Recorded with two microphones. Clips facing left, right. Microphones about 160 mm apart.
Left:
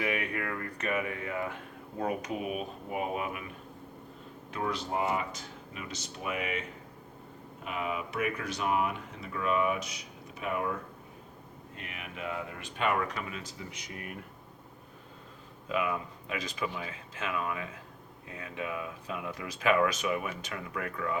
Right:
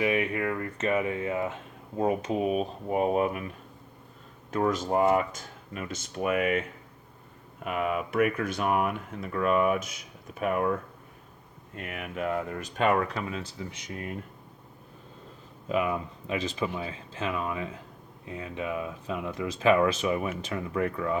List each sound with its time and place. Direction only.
0.0 s speech: 20° right (ahead or behind); by 3.4 s 40° right (ahead or behind)
4.5 s speech: 45° right (ahead or behind)
11.8 s speech: 50° right (ahead or behind); by 14.3 s 25° right (ahead or behind)
15.7 s speech: 30° right (ahead or behind)